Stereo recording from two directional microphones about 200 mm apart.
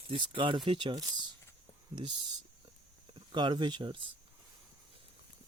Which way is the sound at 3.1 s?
25° right (ahead or behind).